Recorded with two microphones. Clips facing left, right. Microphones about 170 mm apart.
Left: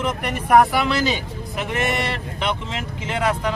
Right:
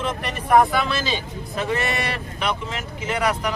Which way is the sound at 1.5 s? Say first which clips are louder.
Even; 20° left (ahead or behind).